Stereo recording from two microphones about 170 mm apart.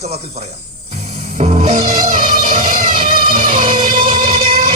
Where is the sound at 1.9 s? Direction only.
55° right (ahead or behind).